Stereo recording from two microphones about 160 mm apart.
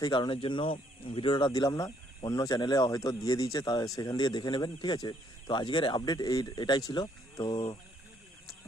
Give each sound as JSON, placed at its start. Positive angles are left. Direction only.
{"t": 0.0, "sound": "speech", "side_deg": 30}